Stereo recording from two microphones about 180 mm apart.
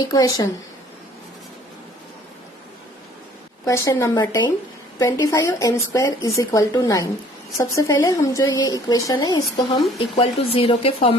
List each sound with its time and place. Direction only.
0.0 s speech: 20° left (ahead or behind)
3.7 s speech: 15° left (ahead or behind); by 11.2 s 30° left (ahead or behind)